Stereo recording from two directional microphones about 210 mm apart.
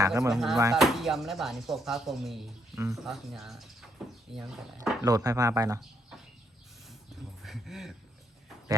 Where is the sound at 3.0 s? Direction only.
Centre (ahead or behind).